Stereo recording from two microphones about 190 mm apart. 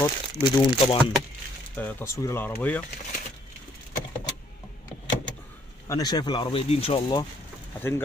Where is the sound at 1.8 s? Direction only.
15° left (ahead or behind).